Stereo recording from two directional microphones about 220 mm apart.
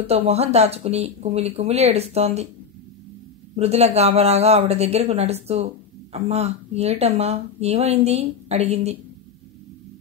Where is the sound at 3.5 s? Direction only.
30° right (ahead or behind).